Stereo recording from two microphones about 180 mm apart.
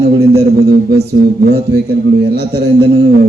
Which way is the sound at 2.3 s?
65° right (ahead or behind).